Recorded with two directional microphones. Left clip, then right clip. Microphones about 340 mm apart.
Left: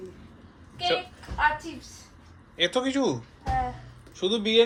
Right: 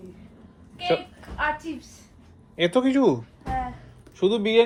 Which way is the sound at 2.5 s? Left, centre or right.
Centre.